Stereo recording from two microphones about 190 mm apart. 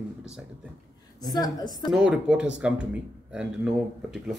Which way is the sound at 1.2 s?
20° left (ahead or behind).